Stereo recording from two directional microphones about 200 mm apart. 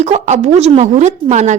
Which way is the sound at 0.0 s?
35° right (ahead or behind).